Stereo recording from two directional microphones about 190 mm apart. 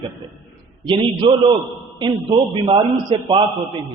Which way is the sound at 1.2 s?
25° right (ahead or behind).